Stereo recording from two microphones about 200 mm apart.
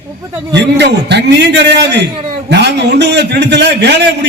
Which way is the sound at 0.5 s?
60° right (ahead or behind).